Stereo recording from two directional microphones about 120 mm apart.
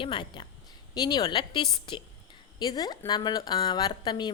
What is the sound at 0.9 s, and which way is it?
A woman's voice, 35° left (ahead or behind).